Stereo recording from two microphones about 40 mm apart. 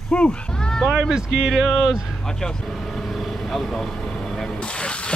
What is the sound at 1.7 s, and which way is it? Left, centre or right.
Speech, centre.